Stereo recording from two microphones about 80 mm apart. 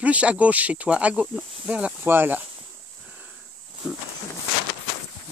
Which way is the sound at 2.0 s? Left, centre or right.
Right.